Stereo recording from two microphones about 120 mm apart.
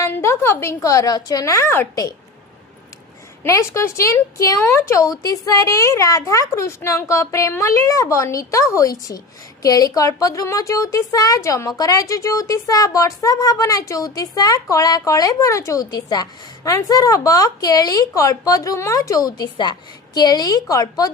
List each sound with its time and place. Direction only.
0.0 s speech: 20° left (ahead or behind)
3.4 s speech: 25° left (ahead or behind)